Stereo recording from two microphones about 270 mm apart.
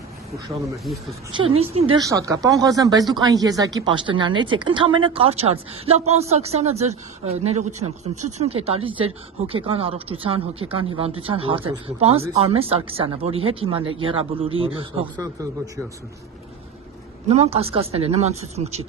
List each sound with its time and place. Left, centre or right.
1.6 s speech: right
17.2 s speech: right